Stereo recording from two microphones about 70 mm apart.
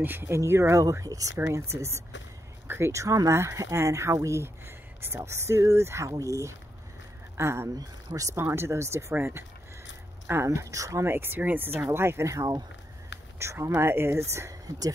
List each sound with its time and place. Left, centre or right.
0.0 s speech: right
1.0 s speech: right
1.5 s speech: right
6.0 s speech: right
7.3 s speech: right
11.1 s speech: right